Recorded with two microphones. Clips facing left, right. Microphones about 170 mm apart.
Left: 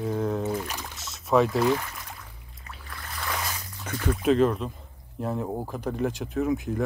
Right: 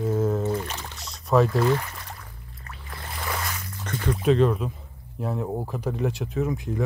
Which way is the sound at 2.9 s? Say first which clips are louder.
Right 2 dB; 25° right (ahead or behind).